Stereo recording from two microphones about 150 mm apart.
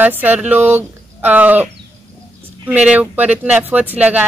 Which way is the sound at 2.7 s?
10° right (ahead or behind).